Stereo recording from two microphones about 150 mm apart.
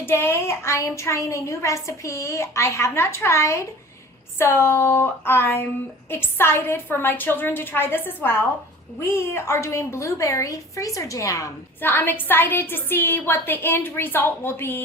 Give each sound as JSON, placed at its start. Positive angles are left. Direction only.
{"t": 0.0, "sound": "a woman's voice", "side_deg": 15}